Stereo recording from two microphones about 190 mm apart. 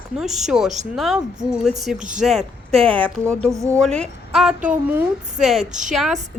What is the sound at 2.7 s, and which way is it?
Speech, 30° right (ahead or behind).